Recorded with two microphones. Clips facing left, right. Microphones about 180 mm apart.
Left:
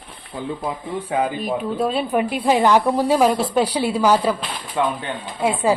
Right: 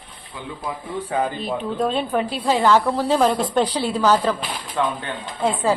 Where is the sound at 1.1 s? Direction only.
10° left (ahead or behind).